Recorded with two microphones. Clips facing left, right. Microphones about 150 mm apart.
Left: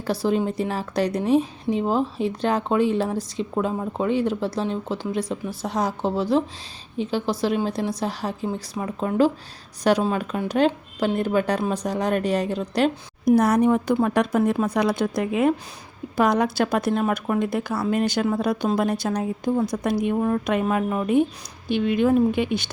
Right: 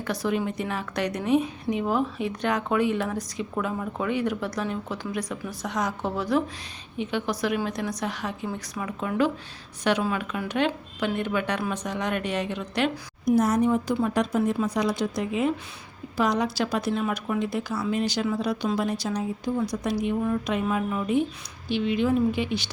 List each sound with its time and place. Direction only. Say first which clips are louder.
0.0 s a woman's voice: left 4 dB; 30° left (ahead or behind)
13.2 s speech: left 4 dB; 65° left (ahead or behind)